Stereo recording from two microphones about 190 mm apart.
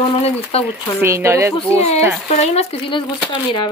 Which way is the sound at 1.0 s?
15° right (ahead or behind).